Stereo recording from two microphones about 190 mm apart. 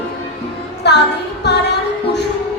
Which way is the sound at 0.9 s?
60° left (ahead or behind).